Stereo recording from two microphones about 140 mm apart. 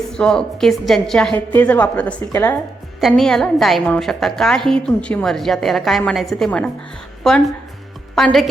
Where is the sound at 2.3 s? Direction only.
20° left (ahead or behind).